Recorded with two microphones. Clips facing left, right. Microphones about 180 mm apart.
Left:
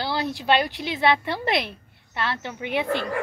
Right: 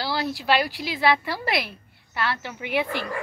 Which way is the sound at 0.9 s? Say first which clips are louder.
Left 1 dB; 25° left (ahead or behind).